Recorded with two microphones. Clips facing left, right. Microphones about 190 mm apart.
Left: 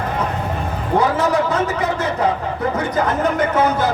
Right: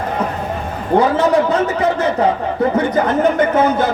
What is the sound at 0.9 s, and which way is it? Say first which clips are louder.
A man's voice: right 4 dB; 30° right (ahead or behind).